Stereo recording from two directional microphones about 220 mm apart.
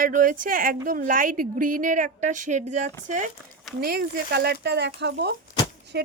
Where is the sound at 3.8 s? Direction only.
45° right (ahead or behind).